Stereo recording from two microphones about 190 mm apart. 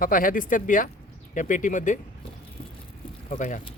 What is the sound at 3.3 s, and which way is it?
Speech, 45° left (ahead or behind).